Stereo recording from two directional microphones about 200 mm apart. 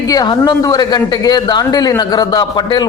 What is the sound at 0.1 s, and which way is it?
Speech, 20° left (ahead or behind).